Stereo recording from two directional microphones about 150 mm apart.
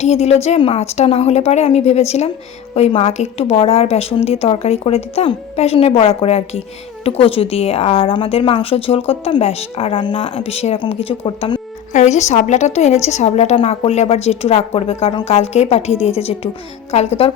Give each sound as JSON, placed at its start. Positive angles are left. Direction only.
{"t": 0.0, "sound": "a woman's voice", "side_deg": 45}
{"t": 11.9, "sound": "a woman's voice", "side_deg": 50}